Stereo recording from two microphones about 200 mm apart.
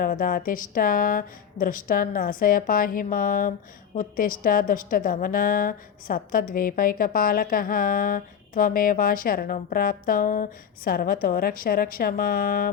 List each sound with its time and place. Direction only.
0.0 s a woman's voice: 45° left (ahead or behind)